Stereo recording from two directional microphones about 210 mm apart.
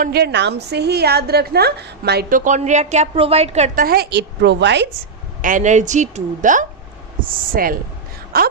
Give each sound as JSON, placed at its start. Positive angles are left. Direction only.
{"t": 0.0, "sound": "a woman's voice", "side_deg": -50}
{"t": 3.8, "sound": "a woman's voice", "side_deg": -50}
{"t": 5.4, "sound": "a woman's voice", "side_deg": -40}